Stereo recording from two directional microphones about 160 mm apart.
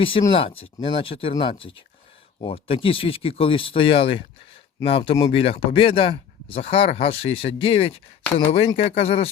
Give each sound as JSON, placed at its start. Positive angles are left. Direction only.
{"t": 0.0, "sound": "speech", "side_deg": 35}